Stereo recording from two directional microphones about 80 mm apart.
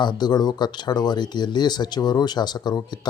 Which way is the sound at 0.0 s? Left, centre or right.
Left.